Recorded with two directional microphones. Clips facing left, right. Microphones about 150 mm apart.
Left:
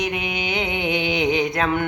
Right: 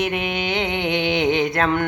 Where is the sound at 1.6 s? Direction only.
10° left (ahead or behind).